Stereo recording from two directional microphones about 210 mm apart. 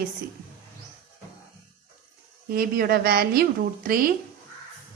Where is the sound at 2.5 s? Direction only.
45° right (ahead or behind).